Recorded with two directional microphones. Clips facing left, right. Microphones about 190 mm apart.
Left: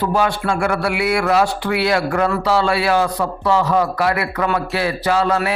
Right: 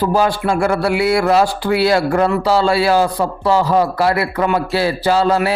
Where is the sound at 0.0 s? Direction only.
35° right (ahead or behind).